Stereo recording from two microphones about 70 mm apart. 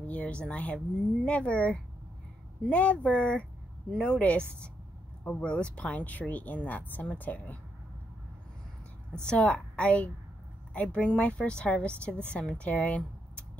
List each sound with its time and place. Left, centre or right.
0.0 s speech: left
9.2 s speech: centre